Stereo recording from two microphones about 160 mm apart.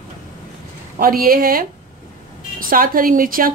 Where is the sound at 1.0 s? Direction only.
65° right (ahead or behind).